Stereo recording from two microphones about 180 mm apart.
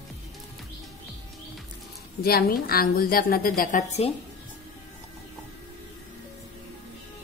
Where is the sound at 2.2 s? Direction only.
55° left (ahead or behind).